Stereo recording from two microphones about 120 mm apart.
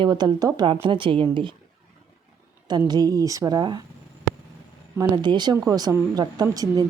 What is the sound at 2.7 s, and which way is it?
A woman's voice, 35° right (ahead or behind).